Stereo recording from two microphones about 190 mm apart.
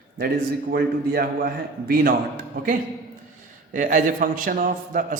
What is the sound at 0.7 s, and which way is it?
A man's voice, 55° right (ahead or behind).